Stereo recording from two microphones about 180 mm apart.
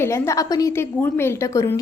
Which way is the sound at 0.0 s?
15° left (ahead or behind).